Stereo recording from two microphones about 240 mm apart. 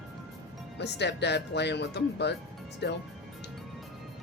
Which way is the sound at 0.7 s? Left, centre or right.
Left.